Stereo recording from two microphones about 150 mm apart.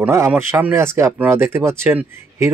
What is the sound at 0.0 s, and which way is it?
Speech, 15° right (ahead or behind).